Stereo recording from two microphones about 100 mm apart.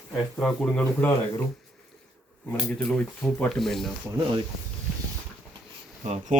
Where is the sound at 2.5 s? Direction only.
5° left (ahead or behind).